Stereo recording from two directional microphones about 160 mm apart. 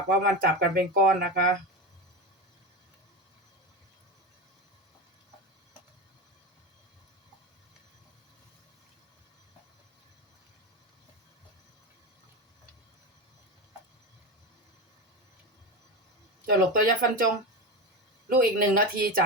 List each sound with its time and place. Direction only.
0.1 s speech: 70° right (ahead or behind)
16.5 s speech: 60° right (ahead or behind)
18.3 s speech: 60° right (ahead or behind)